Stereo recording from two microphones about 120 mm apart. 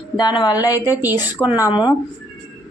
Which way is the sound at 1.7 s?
35° left (ahead or behind).